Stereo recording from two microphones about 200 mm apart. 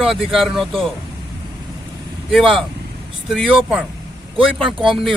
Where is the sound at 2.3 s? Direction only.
Centre (ahead or behind).